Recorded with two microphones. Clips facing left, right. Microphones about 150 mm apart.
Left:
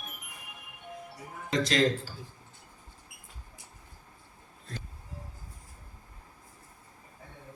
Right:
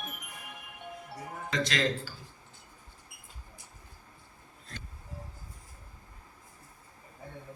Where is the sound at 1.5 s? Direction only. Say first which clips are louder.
Left 4 dB; 40° left (ahead or behind).